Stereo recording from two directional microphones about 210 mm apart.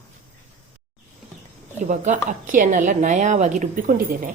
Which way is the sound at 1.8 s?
35° right (ahead or behind).